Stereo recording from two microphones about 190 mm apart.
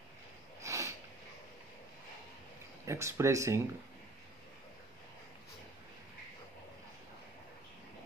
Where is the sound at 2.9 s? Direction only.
15° right (ahead or behind).